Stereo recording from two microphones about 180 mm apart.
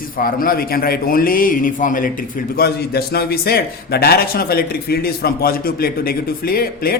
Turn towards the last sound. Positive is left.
turn(degrees=55)  # may be behind; listen again after turning